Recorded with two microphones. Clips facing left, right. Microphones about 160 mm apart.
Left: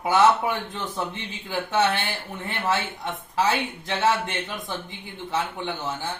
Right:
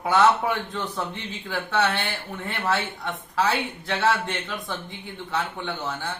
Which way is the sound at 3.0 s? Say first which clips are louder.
Left 1 dB; 20° left (ahead or behind).